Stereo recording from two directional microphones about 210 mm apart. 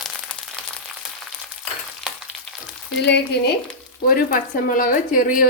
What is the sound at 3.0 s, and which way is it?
Speech, 55° left (ahead or behind).